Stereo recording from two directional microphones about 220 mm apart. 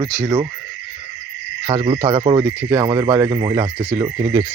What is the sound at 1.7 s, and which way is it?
Speech, 25° right (ahead or behind).